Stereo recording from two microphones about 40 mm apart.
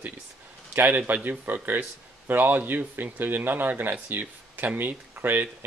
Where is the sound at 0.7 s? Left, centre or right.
Right.